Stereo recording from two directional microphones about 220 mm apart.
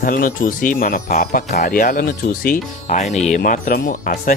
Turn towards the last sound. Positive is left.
turn(degrees=40)  # may be behind; listen again after turning